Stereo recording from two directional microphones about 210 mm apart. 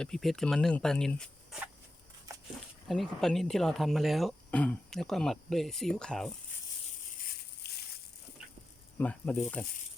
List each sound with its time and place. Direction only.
0.0 s speech: centre (ahead or behind)
2.8 s speech: centre (ahead or behind)
7.2 s a sound: 45° left (ahead or behind)
9.0 s speech: 5° left (ahead or behind)